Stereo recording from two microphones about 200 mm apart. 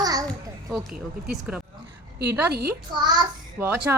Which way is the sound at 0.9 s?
Centre (ahead or behind).